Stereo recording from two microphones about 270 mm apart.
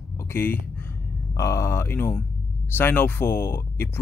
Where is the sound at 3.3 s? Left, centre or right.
Left.